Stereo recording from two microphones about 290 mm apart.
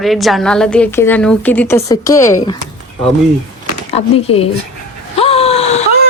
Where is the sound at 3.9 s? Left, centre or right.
Centre.